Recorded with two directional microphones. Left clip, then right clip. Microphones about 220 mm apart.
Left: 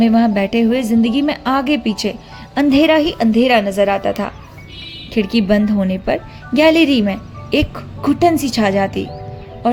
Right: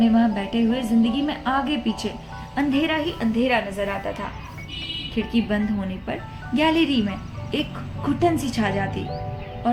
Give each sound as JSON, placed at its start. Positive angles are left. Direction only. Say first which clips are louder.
{"t": 0.0, "sound": "a woman's voice", "louder": "left 7 dB", "side_deg": 40}